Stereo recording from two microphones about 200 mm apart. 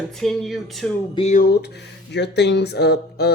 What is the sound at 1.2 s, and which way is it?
Speech, 40° left (ahead or behind).